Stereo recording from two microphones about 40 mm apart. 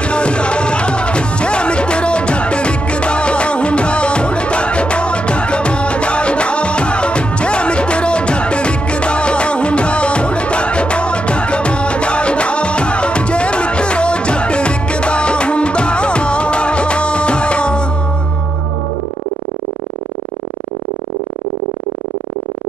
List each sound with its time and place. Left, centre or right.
0.0 s music: left